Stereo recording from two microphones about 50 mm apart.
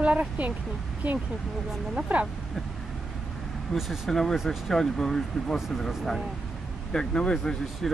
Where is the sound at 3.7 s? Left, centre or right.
Centre.